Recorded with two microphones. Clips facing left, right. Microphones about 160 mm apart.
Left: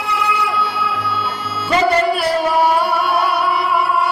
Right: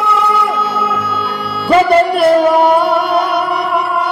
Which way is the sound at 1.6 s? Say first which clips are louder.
Right 5 dB; 60° right (ahead or behind).